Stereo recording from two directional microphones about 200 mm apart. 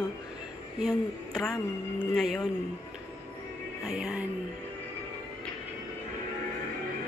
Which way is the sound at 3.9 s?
5° right (ahead or behind).